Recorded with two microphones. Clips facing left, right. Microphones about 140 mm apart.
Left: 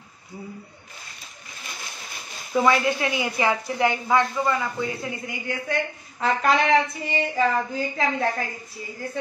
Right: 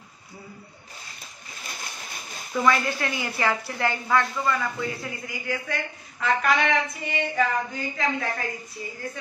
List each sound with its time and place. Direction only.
2.5 s speech: 20° left (ahead or behind)